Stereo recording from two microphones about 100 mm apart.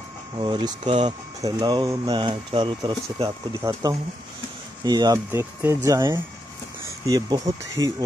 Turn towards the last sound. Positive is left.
turn(degrees=-40)  # may be behind; listen again after turning